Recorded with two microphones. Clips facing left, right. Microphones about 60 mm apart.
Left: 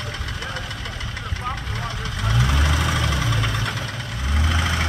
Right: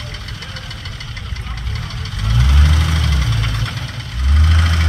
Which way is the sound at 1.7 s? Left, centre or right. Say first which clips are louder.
Left 1 dB; centre.